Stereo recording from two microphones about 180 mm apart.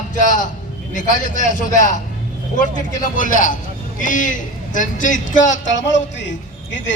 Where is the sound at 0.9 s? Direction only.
45° left (ahead or behind).